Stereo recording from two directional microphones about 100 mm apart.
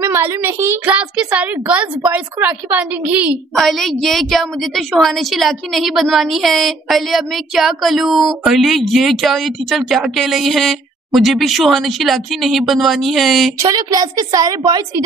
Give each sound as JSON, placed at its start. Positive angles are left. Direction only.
{"t": 0.1, "sound": "a child's voice", "side_deg": -25}
{"t": 0.8, "sound": "a woman's voice", "side_deg": -15}
{"t": 3.5, "sound": "a woman's voice", "side_deg": 0}
{"t": 13.6, "sound": "a woman's voice", "side_deg": -40}